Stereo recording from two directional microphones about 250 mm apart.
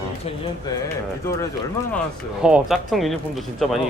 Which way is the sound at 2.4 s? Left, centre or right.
Centre.